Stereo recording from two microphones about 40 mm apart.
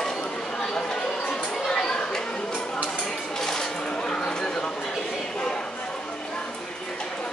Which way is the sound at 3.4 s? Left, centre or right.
Centre.